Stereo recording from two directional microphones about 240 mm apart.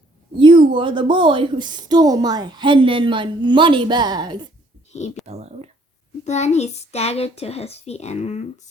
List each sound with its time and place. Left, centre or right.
0.3 s a woman's voice: centre
4.9 s speech: left
5.2 s a woman's voice: right
6.2 s a child's voice: left